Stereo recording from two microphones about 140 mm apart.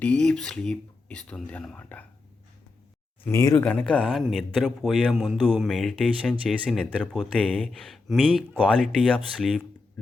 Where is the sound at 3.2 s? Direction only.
20° left (ahead or behind).